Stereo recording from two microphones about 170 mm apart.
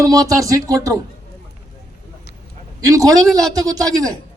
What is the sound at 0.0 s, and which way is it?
Speech, 20° right (ahead or behind).